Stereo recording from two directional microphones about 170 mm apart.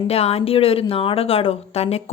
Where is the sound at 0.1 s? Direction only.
35° left (ahead or behind).